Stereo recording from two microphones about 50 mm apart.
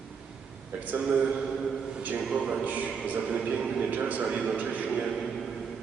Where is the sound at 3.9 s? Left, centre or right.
Right.